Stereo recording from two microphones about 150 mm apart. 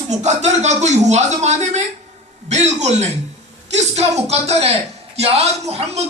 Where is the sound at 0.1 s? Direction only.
50° right (ahead or behind).